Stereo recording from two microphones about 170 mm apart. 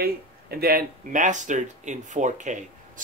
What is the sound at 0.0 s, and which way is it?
Speech, 65° right (ahead or behind).